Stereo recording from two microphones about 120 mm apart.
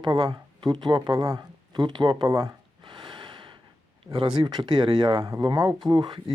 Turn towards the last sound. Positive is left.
turn(degrees=-45)  # may be behind; listen again after turning